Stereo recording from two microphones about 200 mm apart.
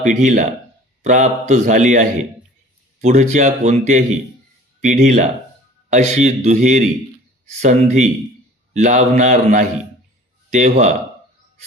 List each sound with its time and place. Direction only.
0.0 s a man's voice: 35° right (ahead or behind)